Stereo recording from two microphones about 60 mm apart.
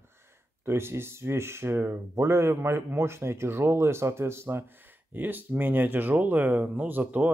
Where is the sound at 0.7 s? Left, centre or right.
Right.